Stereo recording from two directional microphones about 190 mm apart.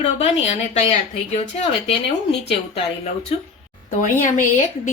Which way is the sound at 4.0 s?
45° left (ahead or behind).